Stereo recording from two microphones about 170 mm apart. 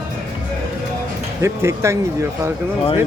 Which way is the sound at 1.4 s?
15° right (ahead or behind).